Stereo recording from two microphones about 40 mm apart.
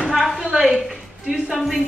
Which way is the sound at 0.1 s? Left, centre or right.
Centre.